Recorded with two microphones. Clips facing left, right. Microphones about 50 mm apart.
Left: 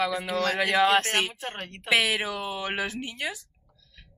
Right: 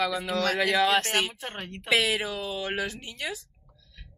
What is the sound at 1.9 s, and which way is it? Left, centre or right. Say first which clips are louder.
A woman's voice: left 1 dB; left.